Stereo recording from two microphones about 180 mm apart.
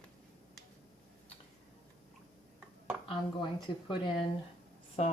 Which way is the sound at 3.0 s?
25° left (ahead or behind).